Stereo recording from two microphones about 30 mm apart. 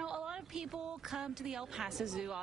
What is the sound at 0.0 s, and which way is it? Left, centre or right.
A woman's voice, right.